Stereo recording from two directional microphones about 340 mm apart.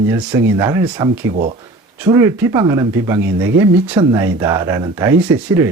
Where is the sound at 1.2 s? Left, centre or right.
Right.